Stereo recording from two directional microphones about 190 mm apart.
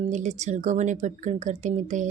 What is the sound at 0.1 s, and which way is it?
Speech, 40° right (ahead or behind).